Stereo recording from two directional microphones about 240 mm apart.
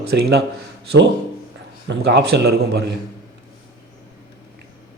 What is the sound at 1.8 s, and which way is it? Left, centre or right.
A man's voice, right.